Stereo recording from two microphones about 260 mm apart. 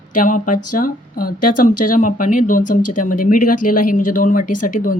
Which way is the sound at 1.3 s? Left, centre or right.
Left.